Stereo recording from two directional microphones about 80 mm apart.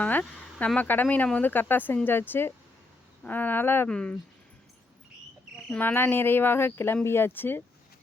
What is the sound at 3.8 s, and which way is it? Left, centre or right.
Speech, centre.